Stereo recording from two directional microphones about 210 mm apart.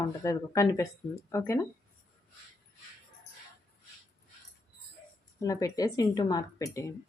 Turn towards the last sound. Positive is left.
turn(degrees=15)  # may be behind; listen again after turning